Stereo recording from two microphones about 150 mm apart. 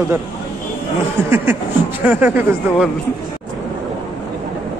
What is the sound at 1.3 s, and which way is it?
Speech, 15° right (ahead or behind).